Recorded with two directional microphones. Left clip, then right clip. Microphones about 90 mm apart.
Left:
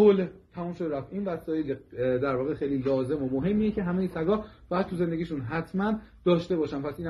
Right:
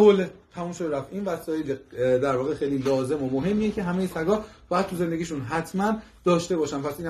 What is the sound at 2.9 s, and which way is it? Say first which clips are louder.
A man's voice: right 3 dB; 25° right (ahead or behind).